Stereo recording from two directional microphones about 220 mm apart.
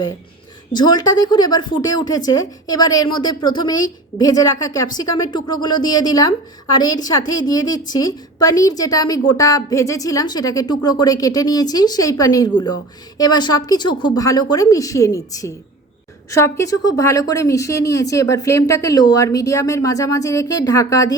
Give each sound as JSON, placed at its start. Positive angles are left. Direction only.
{"t": 0.8, "sound": "speech", "side_deg": 15}